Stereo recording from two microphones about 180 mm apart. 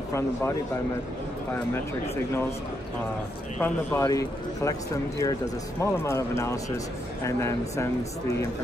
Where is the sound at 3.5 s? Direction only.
10° left (ahead or behind).